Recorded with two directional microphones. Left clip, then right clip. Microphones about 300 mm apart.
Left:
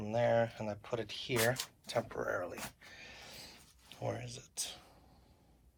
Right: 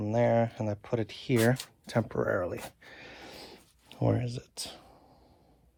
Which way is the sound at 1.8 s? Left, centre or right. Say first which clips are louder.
Right 7 dB; right.